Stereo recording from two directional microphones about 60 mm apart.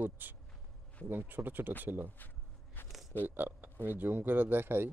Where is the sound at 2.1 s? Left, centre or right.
Left.